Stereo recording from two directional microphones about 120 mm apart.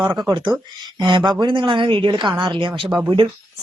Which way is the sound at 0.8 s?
35° right (ahead or behind).